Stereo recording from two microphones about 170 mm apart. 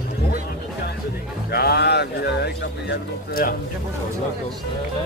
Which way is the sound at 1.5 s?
70° left (ahead or behind).